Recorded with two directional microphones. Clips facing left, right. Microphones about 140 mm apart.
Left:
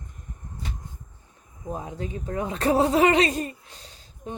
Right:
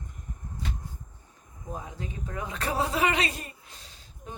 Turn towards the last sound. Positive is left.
turn(degrees=30)  # may be behind; listen again after turning